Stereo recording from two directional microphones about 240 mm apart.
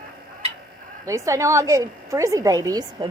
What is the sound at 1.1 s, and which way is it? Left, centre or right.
A woman's voice, centre.